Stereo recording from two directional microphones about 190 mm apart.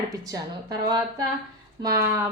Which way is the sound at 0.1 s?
20° right (ahead or behind).